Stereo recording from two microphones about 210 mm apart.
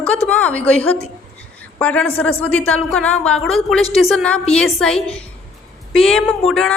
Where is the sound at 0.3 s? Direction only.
5° left (ahead or behind).